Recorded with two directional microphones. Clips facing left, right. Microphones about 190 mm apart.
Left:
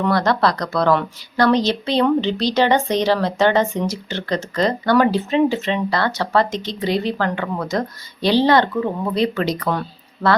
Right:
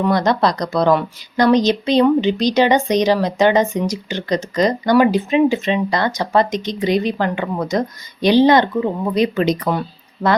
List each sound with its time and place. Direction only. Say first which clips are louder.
0.0 s a woman's voice: right 2 dB; 15° right (ahead or behind)